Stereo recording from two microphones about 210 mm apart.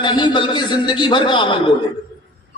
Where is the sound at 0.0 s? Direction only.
20° left (ahead or behind).